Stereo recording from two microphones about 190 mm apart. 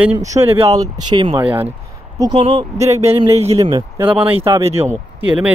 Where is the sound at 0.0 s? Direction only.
10° right (ahead or behind); by 3.3 s 35° right (ahead or behind).